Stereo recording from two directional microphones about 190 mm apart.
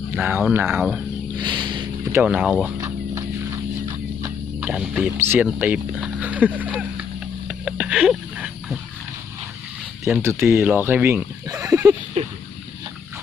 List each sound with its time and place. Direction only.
0.2 s speech: 10° right (ahead or behind)
1.4 s a sound: 25° right (ahead or behind)
2.1 s speech: 5° right (ahead or behind)
2.8 s horse: 15° right (ahead or behind)
4.7 s speech: 5° right (ahead or behind)
7.4 s wild animals: 5° right (ahead or behind)
10.0 s speech: 15° right (ahead or behind)